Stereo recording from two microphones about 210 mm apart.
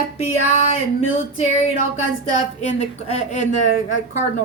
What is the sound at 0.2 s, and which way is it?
Speech, 30° left (ahead or behind).